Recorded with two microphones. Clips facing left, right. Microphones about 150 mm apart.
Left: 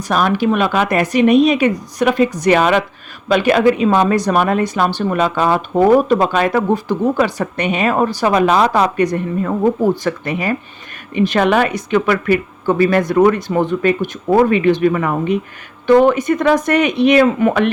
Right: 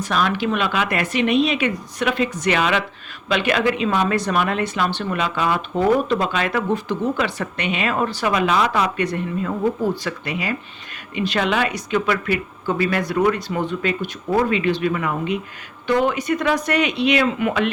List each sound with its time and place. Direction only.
0.0 s speech: 45° left (ahead or behind)
9.4 s speech: 50° left (ahead or behind)
15.9 s speech: 55° left (ahead or behind)